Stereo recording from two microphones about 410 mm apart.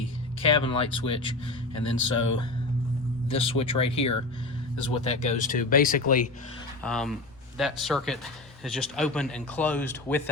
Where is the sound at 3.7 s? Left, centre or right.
Centre.